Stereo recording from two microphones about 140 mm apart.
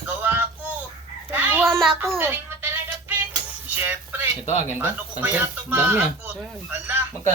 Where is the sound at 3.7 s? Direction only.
15° right (ahead or behind).